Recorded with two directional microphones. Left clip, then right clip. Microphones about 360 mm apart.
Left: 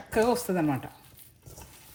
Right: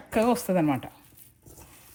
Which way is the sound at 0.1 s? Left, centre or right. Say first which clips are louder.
Right 1 dB; centre.